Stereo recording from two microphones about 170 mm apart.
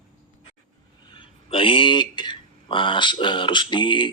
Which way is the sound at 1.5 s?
30° left (ahead or behind).